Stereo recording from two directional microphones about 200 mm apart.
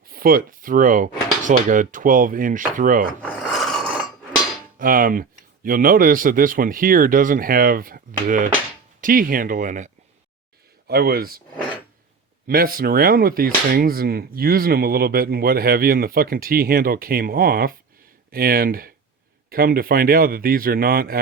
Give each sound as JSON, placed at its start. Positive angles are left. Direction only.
{"t": 0.1, "sound": "speech", "side_deg": -45}
{"t": 3.2, "sound": "filing", "side_deg": 0}
{"t": 4.8, "sound": "speech", "side_deg": -45}
{"t": 10.8, "sound": "speech", "side_deg": -50}
{"t": 12.5, "sound": "speech", "side_deg": -45}